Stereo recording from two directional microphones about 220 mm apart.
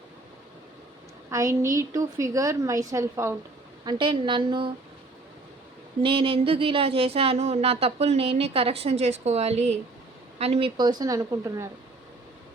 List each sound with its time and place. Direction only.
1.3 s a woman's voice: 15° right (ahead or behind)
6.0 s speech: 25° right (ahead or behind)